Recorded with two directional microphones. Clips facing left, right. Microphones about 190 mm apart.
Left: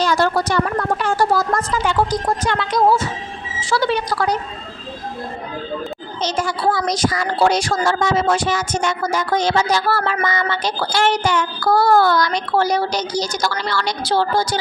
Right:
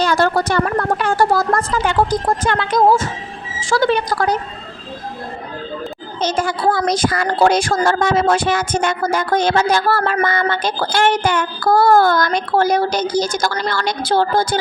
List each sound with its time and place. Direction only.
0.0 s speech: 55° right (ahead or behind)
6.2 s a child's voice: 55° right (ahead or behind)